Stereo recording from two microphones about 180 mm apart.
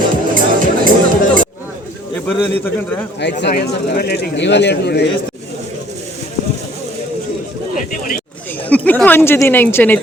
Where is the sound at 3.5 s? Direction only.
60° left (ahead or behind).